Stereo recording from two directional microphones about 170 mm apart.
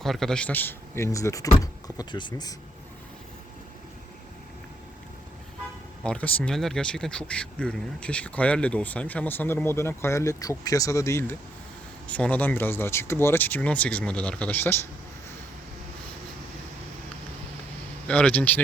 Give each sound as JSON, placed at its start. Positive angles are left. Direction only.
{"t": 0.0, "sound": "speech", "side_deg": 0}
{"t": 6.0, "sound": "speech", "side_deg": 5}
{"t": 18.1, "sound": "speech", "side_deg": 10}